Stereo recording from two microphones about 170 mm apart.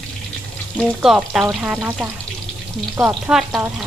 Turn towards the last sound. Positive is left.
turn(degrees=0)  # may be behind; listen again after turning